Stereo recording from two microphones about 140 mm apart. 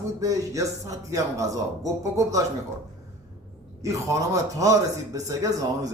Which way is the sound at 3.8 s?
20° right (ahead or behind).